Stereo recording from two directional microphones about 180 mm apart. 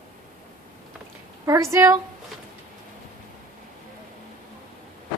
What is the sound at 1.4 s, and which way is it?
Speech, 15° right (ahead or behind).